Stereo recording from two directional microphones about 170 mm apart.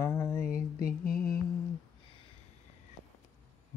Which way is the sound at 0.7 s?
60° left (ahead or behind).